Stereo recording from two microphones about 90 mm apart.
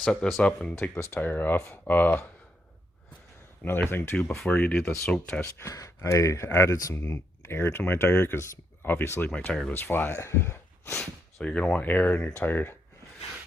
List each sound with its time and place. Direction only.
0.0 s speech: 5° left (ahead or behind)
0.8 s speech: 25° left (ahead or behind)
3.6 s speech: 25° left (ahead or behind)
4.4 s speech: 10° left (ahead or behind)
5.4 s speech: 30° left (ahead or behind)
9.2 s speech: 15° left (ahead or behind)
9.7 s speech: 25° left (ahead or behind)
11.0 s speech: 10° left (ahead or behind)